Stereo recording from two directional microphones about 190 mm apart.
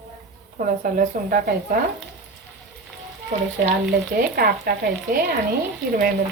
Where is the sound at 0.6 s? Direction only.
45° right (ahead or behind).